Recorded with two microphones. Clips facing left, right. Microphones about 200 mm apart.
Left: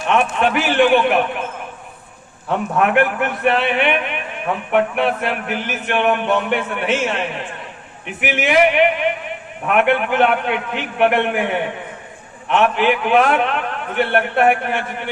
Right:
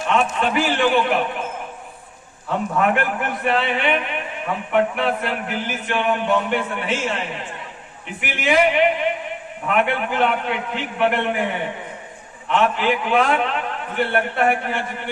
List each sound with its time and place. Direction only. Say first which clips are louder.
0.1 s a man's voice: left 3 dB; 65° left (ahead or behind)
2.7 s a man's voice: left 4 dB; 60° left (ahead or behind)